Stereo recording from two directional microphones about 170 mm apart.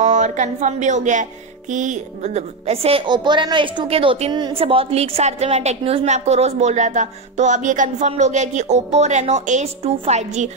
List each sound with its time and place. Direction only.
0.0 s a woman's voice: 45° right (ahead or behind)